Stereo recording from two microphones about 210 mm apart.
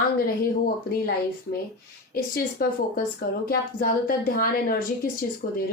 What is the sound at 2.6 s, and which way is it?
A woman's voice, 45° left (ahead or behind).